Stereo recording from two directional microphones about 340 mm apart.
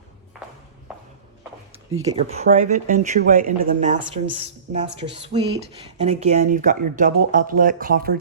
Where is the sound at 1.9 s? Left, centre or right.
Centre.